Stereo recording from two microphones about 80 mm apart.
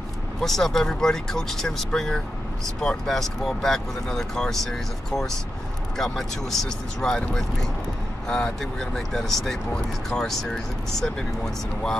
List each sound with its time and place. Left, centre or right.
0.4 s speech: centre